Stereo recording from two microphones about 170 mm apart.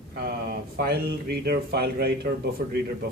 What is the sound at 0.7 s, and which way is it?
A man's voice, 70° right (ahead or behind).